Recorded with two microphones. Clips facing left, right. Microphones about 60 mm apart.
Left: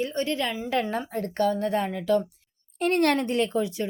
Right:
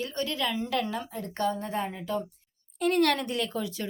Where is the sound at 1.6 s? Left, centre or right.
Left.